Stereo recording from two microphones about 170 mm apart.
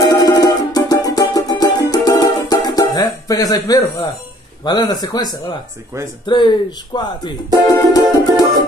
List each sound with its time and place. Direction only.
0.0 s music: 20° left (ahead or behind)
4.6 s speech: 25° left (ahead or behind)